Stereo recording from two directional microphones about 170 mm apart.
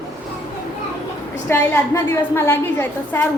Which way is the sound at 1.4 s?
15° left (ahead or behind).